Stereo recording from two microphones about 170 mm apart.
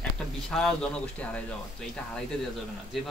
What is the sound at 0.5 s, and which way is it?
Speech, 5° left (ahead or behind).